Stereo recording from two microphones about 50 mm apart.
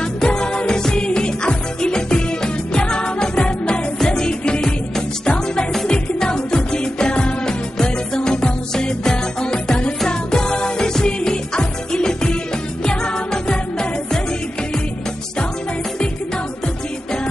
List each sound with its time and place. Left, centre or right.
0.0 s music: centre